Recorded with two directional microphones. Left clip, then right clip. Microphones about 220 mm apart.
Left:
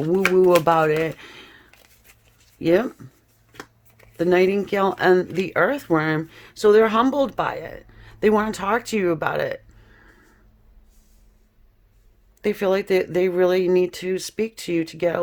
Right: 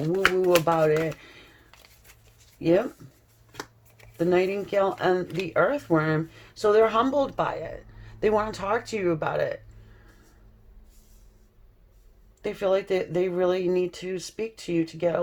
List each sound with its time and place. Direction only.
0.6 s speech: 45° left (ahead or behind)
4.2 s speech: 40° left (ahead or behind)
12.4 s speech: 45° left (ahead or behind)